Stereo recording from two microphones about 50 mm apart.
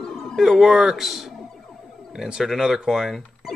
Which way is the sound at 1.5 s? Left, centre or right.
Centre.